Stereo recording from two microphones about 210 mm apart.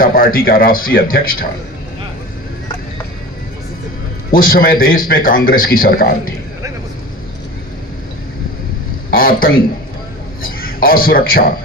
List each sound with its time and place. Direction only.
0.0 s speech: 45° left (ahead or behind)
4.3 s speech: 40° left (ahead or behind)
9.0 s speech: 45° left (ahead or behind)